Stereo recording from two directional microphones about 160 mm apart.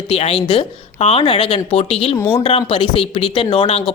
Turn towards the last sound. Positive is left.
turn(degrees=35)  # may be behind; listen again after turning